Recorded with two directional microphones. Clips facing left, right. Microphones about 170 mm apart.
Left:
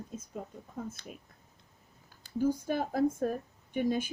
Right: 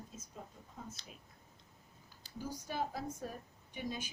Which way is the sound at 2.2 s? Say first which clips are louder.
Left 15 dB; 55° left (ahead or behind).